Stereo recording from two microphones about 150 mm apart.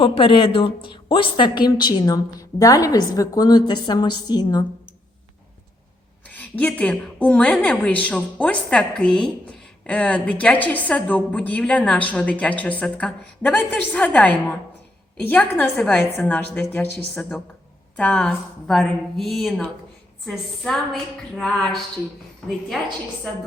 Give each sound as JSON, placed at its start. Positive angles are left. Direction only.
{"t": 0.0, "sound": "a woman's voice", "side_deg": 35}
{"t": 6.2, "sound": "a woman's voice", "side_deg": 10}